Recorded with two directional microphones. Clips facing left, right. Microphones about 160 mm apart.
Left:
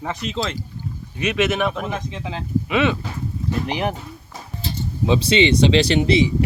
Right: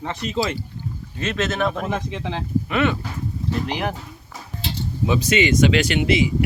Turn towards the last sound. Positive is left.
turn(degrees=35)  # may be behind; listen again after turning